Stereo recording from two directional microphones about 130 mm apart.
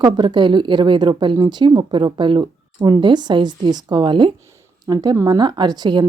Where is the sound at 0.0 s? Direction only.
35° right (ahead or behind).